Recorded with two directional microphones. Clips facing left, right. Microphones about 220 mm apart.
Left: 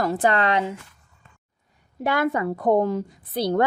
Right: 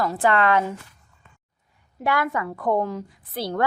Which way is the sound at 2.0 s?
25° left (ahead or behind).